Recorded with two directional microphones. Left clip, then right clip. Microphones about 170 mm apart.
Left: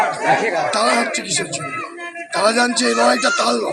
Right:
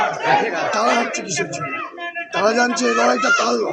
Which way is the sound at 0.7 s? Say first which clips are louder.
Even; 20° left (ahead or behind).